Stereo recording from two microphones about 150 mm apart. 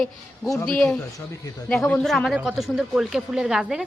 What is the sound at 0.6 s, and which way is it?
A woman's voice, 5° left (ahead or behind).